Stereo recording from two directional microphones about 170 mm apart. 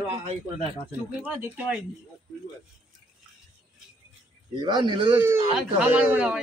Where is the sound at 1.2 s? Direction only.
10° right (ahead or behind).